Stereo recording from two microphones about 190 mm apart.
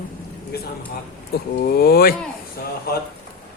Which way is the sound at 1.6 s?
55° left (ahead or behind).